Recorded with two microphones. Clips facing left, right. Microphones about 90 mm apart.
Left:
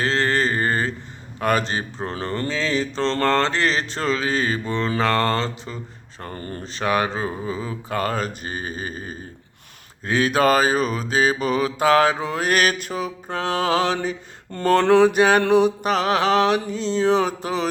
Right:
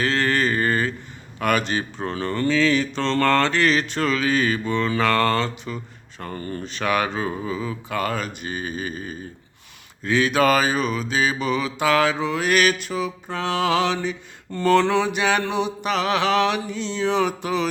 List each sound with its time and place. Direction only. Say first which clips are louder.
0.0 s mantra: even; 30° left (ahead or behind)